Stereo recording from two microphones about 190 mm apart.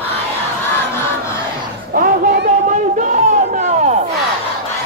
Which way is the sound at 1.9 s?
55° right (ahead or behind).